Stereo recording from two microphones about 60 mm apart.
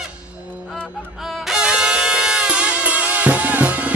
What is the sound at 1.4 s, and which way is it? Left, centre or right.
Music, centre.